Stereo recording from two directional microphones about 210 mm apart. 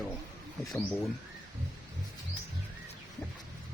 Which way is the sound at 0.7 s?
10° left (ahead or behind).